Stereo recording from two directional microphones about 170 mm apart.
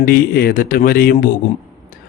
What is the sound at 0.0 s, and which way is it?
Speech, 55° left (ahead or behind).